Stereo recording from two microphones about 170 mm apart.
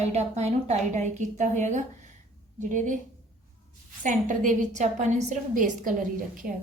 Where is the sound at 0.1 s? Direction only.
40° right (ahead or behind).